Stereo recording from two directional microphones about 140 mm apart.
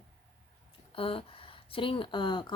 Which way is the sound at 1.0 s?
40° left (ahead or behind).